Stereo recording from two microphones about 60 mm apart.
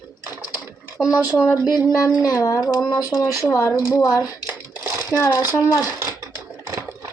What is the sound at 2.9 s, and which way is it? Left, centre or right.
Speech, left.